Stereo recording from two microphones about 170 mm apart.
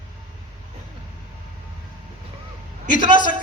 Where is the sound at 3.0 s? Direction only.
25° right (ahead or behind).